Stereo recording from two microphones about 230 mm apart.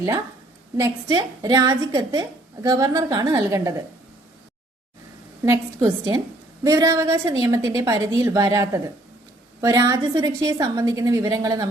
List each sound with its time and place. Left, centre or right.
0.8 s a woman's voice: centre
5.4 s a woman's voice: centre